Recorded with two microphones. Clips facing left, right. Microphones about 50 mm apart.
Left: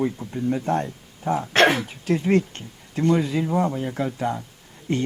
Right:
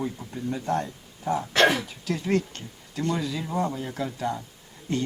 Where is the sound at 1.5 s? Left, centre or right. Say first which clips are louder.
Left 3 dB; left.